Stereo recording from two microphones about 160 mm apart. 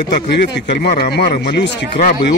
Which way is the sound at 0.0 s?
90° left.